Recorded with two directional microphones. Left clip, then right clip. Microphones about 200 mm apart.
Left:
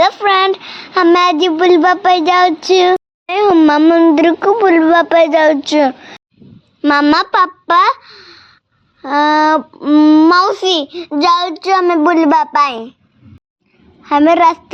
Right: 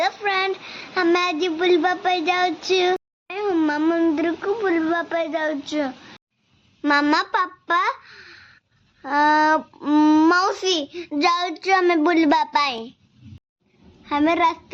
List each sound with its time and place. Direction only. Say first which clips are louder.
0.0 s a child's voice: left 11 dB; 40° left (ahead or behind); by 12.9 s 15° left (ahead or behind)
14.0 s a child's voice: left 10 dB; 40° left (ahead or behind)